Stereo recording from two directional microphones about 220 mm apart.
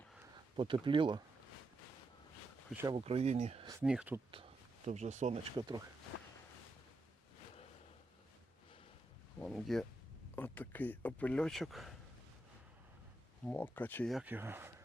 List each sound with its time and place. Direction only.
0.5 s speech: 20° right (ahead or behind)
2.8 s speech: 25° right (ahead or behind)
3.7 s speech: 5° right (ahead or behind)
4.9 s speech: 30° right (ahead or behind)
5.5 s speech: 20° right (ahead or behind)
9.4 s speech: centre (ahead or behind)
13.4 s speech: 5° left (ahead or behind); by 14.7 s 10° right (ahead or behind)